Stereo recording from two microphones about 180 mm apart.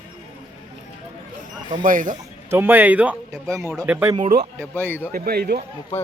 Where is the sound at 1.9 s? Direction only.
50° right (ahead or behind).